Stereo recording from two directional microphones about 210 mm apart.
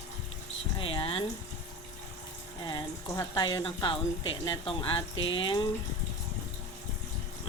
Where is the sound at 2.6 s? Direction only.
20° left (ahead or behind).